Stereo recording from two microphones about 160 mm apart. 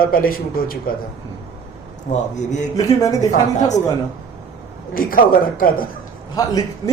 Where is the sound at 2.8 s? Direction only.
20° left (ahead or behind).